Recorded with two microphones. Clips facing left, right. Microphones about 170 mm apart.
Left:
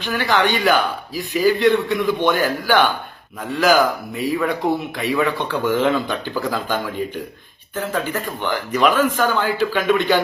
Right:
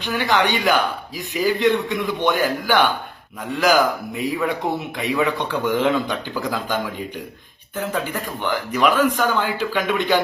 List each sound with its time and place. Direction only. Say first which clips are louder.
0.1 s a man's voice: left 1 dB; 20° right (ahead or behind)
7.8 s a man's voice: left 1 dB; 10° right (ahead or behind)